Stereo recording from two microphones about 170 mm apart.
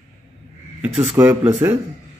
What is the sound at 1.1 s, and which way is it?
Speech, 10° right (ahead or behind).